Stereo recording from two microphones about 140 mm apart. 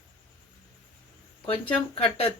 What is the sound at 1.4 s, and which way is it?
Speech, 45° left (ahead or behind).